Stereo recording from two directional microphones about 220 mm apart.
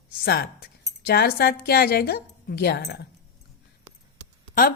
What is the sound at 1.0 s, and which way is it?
A woman's voice, 45° left (ahead or behind).